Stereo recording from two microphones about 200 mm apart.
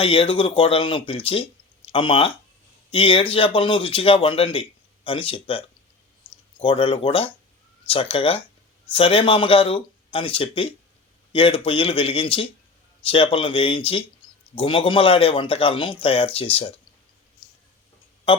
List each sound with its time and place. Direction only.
0.0 s speech: 30° left (ahead or behind)